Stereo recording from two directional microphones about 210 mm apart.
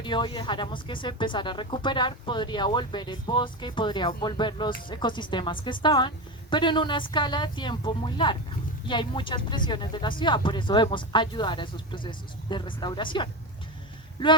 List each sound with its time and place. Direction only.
0.0 s speech: 25° left (ahead or behind)